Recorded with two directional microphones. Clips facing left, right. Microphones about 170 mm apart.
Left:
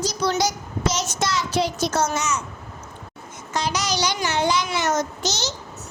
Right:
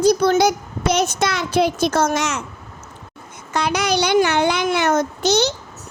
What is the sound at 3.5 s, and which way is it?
A child's voice, 60° right (ahead or behind).